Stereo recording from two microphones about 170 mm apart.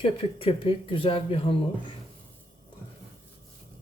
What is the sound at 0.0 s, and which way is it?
Speech, 30° left (ahead or behind).